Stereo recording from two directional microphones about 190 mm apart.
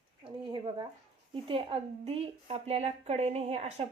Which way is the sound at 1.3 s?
30° right (ahead or behind).